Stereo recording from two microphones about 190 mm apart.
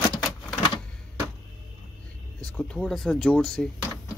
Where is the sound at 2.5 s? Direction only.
5° left (ahead or behind).